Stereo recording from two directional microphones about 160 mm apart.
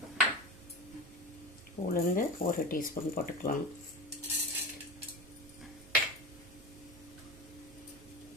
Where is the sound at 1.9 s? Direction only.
60° left (ahead or behind).